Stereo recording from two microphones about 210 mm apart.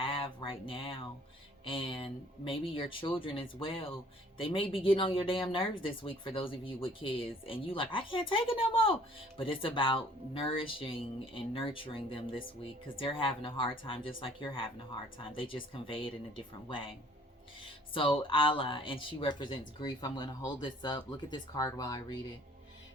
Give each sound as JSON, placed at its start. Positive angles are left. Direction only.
{"t": 0.0, "sound": "a sound", "side_deg": 25}
{"t": 1.6, "sound": "speech", "side_deg": 25}
{"t": 17.9, "sound": "speech", "side_deg": 25}